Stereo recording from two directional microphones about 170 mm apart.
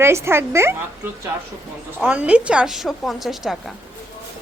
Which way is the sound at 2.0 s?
5° right (ahead or behind).